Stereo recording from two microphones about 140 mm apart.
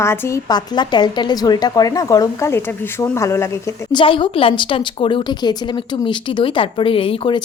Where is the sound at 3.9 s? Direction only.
35° left (ahead or behind).